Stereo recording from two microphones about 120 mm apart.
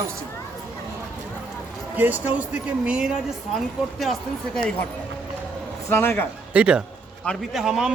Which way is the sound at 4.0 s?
5° left (ahead or behind).